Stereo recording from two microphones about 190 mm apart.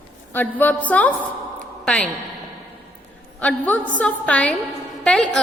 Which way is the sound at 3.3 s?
10° left (ahead or behind).